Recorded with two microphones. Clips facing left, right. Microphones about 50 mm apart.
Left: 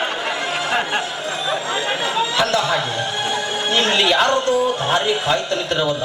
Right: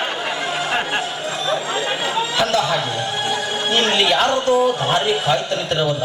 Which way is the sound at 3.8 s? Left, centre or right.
Centre.